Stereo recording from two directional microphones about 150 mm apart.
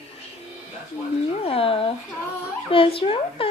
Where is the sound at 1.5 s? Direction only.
40° left (ahead or behind).